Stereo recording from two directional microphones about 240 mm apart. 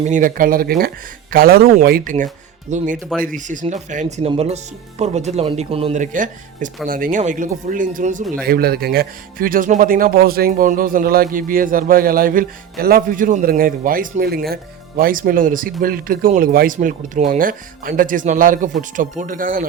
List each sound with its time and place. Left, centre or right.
0.0 s speech: right